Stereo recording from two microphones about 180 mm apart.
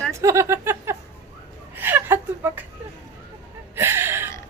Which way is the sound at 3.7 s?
15° right (ahead or behind).